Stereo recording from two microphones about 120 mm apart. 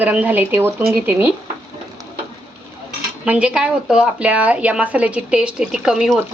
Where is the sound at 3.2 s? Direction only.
10° right (ahead or behind).